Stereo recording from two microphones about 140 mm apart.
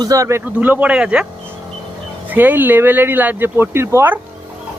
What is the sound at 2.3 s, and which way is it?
Speech, 10° right (ahead or behind).